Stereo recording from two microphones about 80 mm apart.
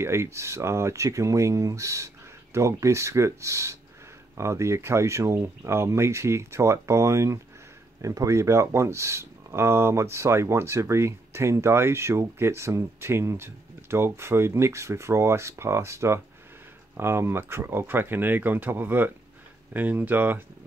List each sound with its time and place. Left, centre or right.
0.0 s speech: right